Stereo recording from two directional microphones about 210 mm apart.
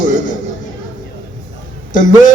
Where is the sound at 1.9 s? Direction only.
40° left (ahead or behind).